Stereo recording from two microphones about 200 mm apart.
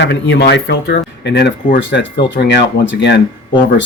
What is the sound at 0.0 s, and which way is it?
Speech, 60° left (ahead or behind).